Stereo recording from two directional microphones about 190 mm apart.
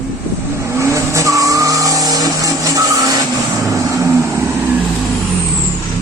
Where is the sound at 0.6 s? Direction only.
15° right (ahead or behind).